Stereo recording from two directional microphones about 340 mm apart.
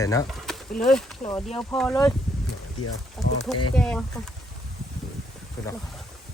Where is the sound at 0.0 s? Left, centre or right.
Centre.